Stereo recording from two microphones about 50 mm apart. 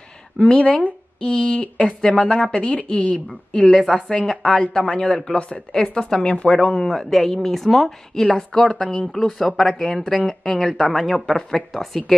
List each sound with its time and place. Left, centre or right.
0.4 s speech: left
3.3 s a woman's voice: centre
4.4 s a woman's voice: left
6.9 s a woman's voice: centre
10.9 s speech: centre